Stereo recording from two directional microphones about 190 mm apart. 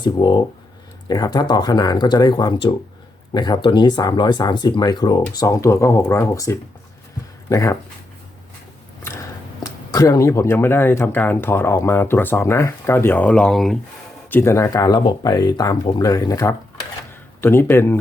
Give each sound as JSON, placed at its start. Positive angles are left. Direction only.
{"t": 0.0, "sound": "speech", "side_deg": 25}
{"t": 9.9, "sound": "speech", "side_deg": 15}
{"t": 14.3, "sound": "speech", "side_deg": 10}